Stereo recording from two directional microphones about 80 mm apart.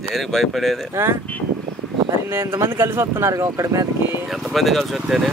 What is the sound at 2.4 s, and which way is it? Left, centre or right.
Speech, right.